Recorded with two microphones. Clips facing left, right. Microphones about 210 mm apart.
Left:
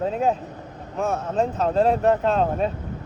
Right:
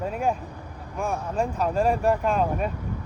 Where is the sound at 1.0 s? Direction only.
20° left (ahead or behind).